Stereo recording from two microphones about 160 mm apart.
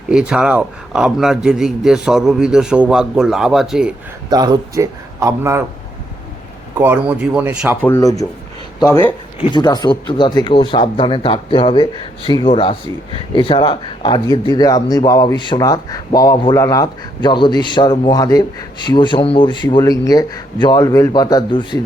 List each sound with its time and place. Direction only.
0.1 s a man's voice: 5° right (ahead or behind)
4.3 s a man's voice: 25° right (ahead or behind)
6.7 s speech: 10° right (ahead or behind)
7.8 s speech: 15° left (ahead or behind)
9.5 s speech: 25° left (ahead or behind)